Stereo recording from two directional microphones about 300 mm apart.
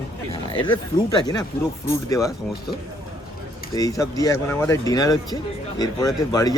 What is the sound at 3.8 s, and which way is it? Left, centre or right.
Speech, centre.